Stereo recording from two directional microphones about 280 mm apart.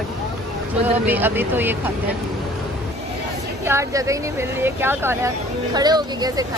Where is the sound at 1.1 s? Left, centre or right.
Centre.